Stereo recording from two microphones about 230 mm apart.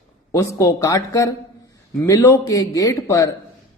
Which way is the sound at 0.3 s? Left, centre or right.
Centre.